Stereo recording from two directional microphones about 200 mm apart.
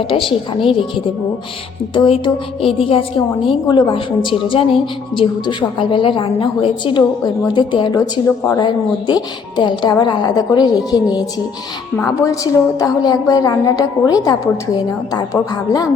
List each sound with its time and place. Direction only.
0.1 s a woman's voice: 25° left (ahead or behind)
1.9 s a woman's voice: 25° left (ahead or behind)